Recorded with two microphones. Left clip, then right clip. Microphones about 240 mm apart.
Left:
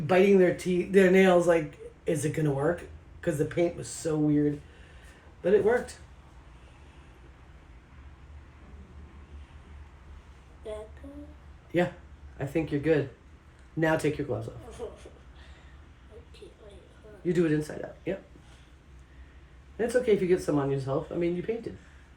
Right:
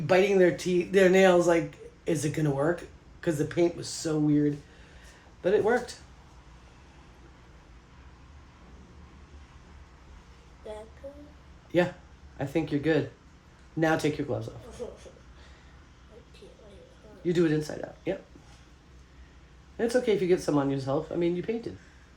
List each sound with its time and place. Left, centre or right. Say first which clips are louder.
0.1 s speech: even; right
11.7 s speech: right 2 dB; right
17.2 s speech: right 1 dB; right
19.7 s speech: left 1 dB; right